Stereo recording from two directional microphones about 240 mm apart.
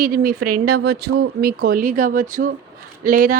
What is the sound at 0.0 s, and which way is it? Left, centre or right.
Speech, right.